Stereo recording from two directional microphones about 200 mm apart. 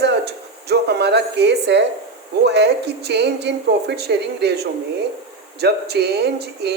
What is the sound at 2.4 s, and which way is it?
Speech, 55° right (ahead or behind).